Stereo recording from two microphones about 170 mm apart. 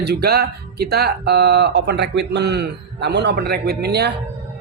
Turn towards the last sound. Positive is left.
turn(degrees=-70)  # may be behind; listen again after turning